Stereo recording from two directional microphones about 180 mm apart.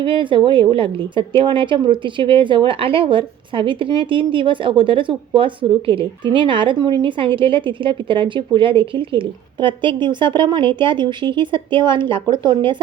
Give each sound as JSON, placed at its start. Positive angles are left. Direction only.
{"t": 0.0, "sound": "speech", "side_deg": -30}